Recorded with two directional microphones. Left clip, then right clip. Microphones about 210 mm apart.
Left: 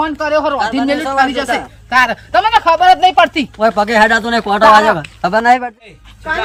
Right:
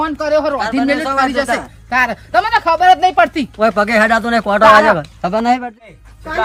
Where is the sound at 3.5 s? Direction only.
10° right (ahead or behind).